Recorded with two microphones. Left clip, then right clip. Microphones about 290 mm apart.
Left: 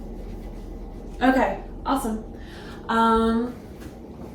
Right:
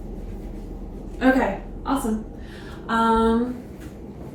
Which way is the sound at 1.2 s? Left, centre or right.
Centre.